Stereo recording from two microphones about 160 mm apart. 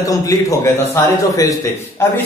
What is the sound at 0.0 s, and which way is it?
Speech, 20° left (ahead or behind).